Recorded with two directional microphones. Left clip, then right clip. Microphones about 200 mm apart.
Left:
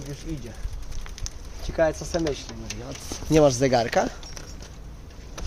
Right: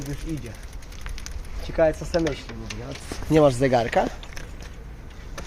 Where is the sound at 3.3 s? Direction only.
5° right (ahead or behind).